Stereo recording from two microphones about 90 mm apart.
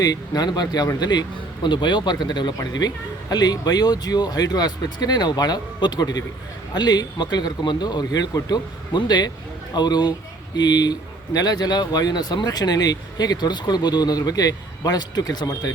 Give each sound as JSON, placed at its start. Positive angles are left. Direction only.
{"t": 0.0, "sound": "speech", "side_deg": 45}